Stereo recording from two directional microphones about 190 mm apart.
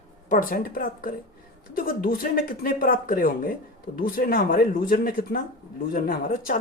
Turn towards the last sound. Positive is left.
turn(degrees=50)  # may be behind; listen again after turning